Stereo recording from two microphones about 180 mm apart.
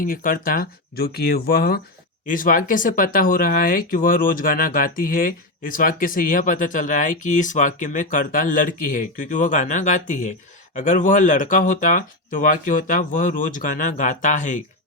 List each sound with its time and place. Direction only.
0.0 s speech: 50° left (ahead or behind)